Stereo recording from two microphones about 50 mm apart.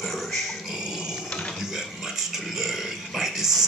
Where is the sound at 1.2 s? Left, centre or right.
Centre.